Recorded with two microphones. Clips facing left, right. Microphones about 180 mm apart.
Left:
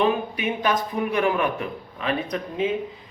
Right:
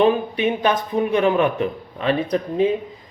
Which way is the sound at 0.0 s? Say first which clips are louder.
Right 5 dB; 30° right (ahead or behind).